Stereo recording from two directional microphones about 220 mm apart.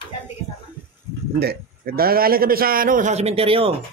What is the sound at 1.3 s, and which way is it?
A man's voice, 45° right (ahead or behind).